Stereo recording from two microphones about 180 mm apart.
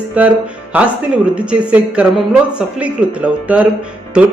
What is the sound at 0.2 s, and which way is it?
A man's voice, 10° right (ahead or behind).